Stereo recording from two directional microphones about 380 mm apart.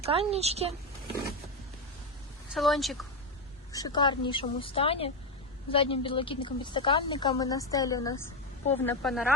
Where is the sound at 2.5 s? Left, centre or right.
Centre.